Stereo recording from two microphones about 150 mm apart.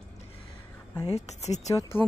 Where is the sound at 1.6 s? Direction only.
20° left (ahead or behind).